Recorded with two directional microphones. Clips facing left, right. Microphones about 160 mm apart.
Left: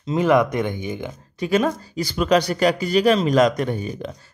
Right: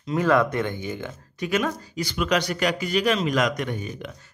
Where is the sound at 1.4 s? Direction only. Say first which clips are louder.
Left 5 dB; 35° left (ahead or behind).